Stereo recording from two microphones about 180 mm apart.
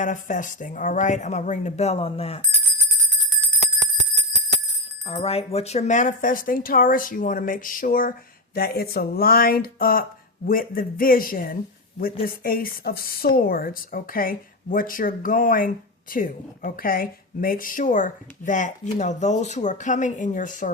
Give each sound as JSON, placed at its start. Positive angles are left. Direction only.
{"t": 0.0, "sound": "a woman's voice", "side_deg": 45}
{"t": 5.0, "sound": "a woman's voice", "side_deg": 35}